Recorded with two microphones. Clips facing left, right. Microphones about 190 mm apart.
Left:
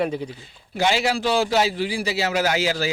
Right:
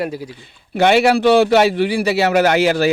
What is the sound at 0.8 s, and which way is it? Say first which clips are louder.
A man's voice: right 9 dB; 60° right (ahead or behind).